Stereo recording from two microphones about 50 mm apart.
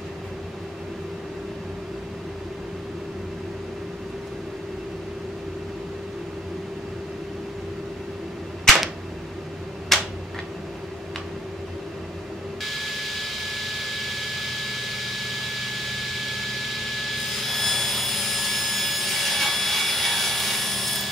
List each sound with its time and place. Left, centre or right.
9.9 s tick-tock: centre
12.7 s jet engine: centre